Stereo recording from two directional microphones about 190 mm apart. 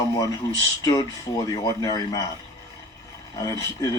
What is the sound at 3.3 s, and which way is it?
Speech, 20° left (ahead or behind).